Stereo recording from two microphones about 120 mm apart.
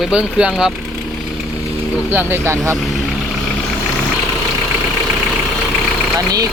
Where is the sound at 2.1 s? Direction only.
20° right (ahead or behind).